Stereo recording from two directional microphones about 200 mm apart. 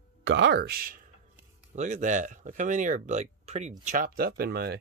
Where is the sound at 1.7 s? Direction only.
35° right (ahead or behind).